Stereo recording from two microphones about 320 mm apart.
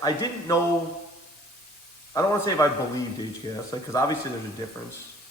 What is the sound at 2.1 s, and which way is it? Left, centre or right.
Speech, centre.